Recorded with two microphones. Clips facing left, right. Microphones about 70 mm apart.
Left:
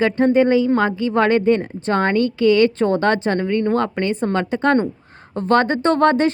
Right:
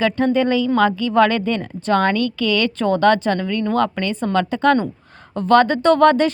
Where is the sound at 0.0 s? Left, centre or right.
Left.